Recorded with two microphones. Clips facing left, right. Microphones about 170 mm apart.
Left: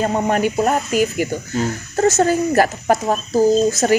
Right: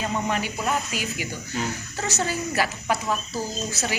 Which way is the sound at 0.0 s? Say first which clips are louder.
Left 9 dB; 50° left (ahead or behind).